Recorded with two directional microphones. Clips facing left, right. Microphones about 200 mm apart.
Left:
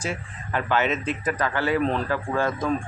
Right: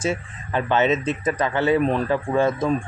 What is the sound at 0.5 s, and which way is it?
Speech, 25° right (ahead or behind).